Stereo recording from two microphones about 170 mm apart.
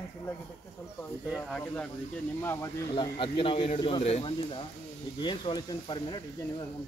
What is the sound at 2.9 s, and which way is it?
A man's voice, 30° left (ahead or behind).